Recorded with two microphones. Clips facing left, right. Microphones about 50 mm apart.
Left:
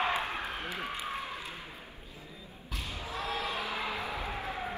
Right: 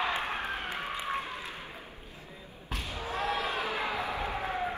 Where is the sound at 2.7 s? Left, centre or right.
Right.